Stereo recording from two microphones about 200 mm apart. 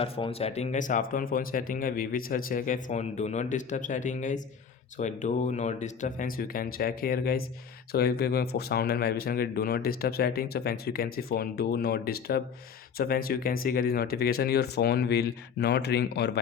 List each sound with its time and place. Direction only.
0.0 s speech: 30° left (ahead or behind); by 16.4 s 55° left (ahead or behind)